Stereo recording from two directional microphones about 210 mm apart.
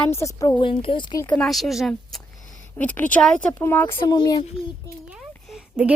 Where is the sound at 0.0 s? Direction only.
15° left (ahead or behind).